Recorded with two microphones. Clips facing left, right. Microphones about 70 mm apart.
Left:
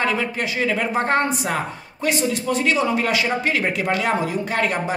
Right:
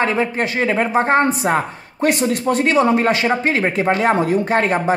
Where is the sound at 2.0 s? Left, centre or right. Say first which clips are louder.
Right 5 dB; right.